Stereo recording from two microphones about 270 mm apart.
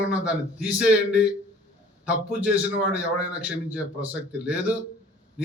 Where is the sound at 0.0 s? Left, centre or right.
Centre.